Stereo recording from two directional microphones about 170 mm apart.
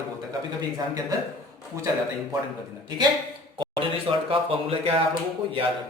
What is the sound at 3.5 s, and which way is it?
A man's voice, 30° right (ahead or behind).